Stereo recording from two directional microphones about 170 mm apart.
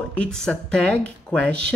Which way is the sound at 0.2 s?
5° left (ahead or behind).